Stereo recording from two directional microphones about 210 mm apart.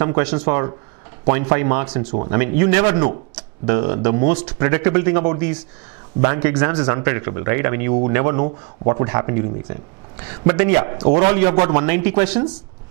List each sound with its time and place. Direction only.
0.0 s speech: 10° right (ahead or behind)